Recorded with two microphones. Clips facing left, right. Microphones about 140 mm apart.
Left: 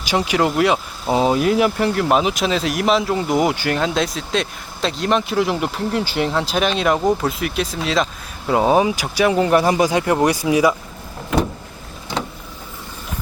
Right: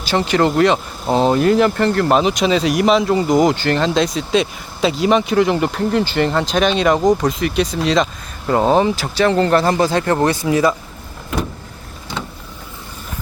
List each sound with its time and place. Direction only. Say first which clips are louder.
0.0 s speech: right 2 dB; 10° left (ahead or behind)